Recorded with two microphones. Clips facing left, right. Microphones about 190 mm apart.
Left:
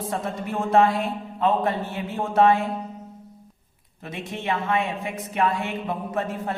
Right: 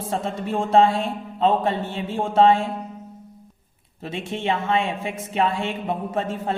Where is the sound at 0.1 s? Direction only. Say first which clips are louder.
Right 5 dB; 30° right (ahead or behind).